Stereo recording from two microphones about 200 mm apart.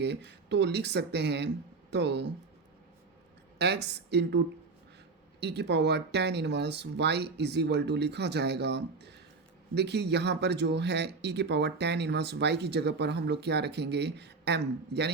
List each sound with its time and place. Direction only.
0.0 s speech: 60° right (ahead or behind)
3.6 s speech: 55° right (ahead or behind)
5.4 s speech: 55° right (ahead or behind)